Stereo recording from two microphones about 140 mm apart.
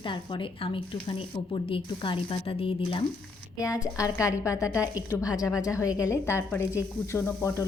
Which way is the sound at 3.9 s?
25° left (ahead or behind).